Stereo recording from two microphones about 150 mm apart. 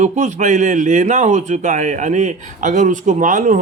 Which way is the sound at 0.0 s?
50° right (ahead or behind).